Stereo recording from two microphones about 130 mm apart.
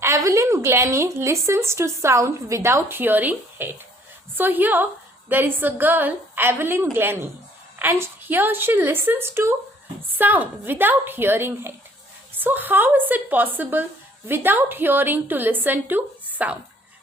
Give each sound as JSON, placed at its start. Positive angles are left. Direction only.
{"t": 0.0, "sound": "a woman's voice", "side_deg": -25}